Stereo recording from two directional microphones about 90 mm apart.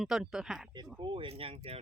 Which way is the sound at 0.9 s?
65° right (ahead or behind).